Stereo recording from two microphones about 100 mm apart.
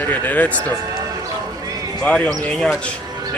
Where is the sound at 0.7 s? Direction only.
35° right (ahead or behind).